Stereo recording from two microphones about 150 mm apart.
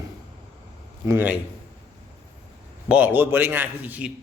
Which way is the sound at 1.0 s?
15° right (ahead or behind).